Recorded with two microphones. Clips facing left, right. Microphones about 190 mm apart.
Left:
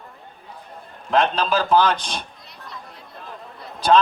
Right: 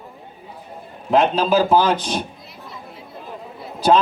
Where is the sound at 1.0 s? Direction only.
5° right (ahead or behind).